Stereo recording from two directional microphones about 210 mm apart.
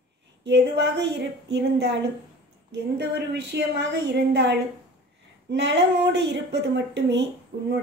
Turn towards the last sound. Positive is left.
turn(degrees=-50)  # may be behind; listen again after turning